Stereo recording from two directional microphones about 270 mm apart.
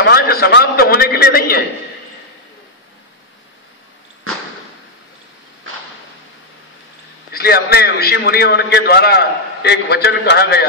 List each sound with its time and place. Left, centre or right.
0.0 s a sound: left
4.3 s arrow: right
7.3 s a man's voice: left